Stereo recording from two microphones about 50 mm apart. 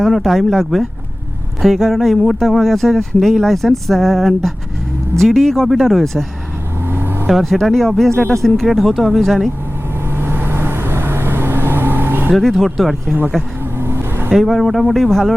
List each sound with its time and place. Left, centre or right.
0.0 s speech: centre
6.8 s vehicle: right
7.3 s speech: centre
10.2 s vehicle: right
12.3 s speech: centre
13.7 s vehicle: right
14.3 s speech: centre